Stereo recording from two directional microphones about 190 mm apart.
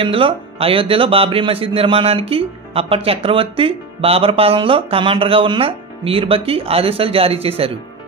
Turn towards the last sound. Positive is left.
turn(degrees=-30)  # may be behind; listen again after turning